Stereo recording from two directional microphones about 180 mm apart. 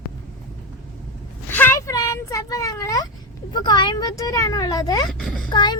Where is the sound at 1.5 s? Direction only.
10° left (ahead or behind).